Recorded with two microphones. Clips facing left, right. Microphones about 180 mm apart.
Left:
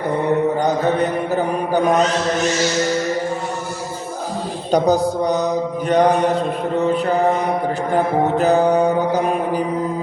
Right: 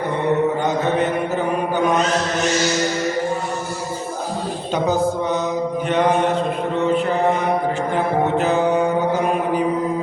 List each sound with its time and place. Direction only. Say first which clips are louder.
0.6 s a sound: left 2 dB; 35° left (ahead or behind)
4.7 s a woman's voice: left 4 dB; 40° left (ahead or behind)
5.9 s music: left 4 dB; 40° left (ahead or behind)
7.9 s music: left 3 dB; 40° left (ahead or behind)